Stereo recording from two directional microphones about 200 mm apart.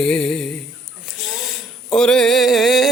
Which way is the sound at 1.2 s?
Centre (ahead or behind).